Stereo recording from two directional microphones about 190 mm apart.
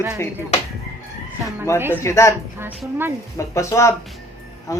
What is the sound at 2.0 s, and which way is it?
Speech, 15° left (ahead or behind).